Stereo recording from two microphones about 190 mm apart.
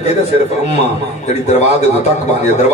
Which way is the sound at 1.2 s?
35° left (ahead or behind).